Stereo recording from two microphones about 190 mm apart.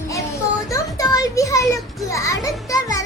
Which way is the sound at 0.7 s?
20° left (ahead or behind).